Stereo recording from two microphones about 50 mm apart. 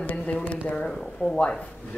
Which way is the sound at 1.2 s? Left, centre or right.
Centre.